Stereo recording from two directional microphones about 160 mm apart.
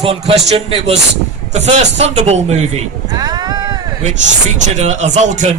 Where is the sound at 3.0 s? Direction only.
25° right (ahead or behind).